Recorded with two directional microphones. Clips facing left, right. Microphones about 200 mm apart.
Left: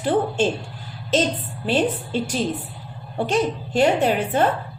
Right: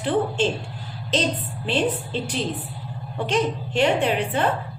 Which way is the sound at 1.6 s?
45° left (ahead or behind).